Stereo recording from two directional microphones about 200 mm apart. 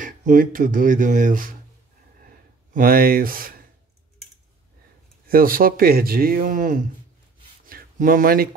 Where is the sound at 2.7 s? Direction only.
45° right (ahead or behind).